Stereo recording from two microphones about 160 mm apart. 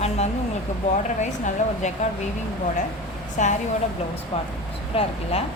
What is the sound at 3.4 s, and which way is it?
Speech, 50° left (ahead or behind).